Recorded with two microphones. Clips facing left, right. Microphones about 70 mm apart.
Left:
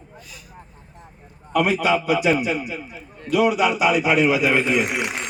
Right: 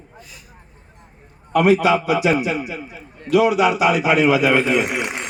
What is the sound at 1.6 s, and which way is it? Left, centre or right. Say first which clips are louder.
Speech: right 7 dB; right.